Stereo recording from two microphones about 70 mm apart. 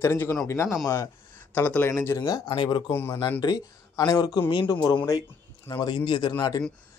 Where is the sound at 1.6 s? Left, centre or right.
Left.